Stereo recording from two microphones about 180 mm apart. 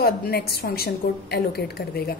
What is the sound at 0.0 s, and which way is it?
A woman's voice, 60° left (ahead or behind).